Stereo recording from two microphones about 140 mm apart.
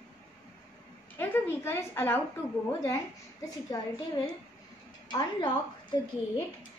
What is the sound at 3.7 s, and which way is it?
Speech, 25° left (ahead or behind).